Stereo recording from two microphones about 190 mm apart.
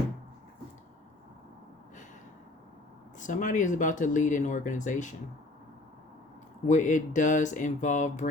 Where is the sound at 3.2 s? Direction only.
45° left (ahead or behind).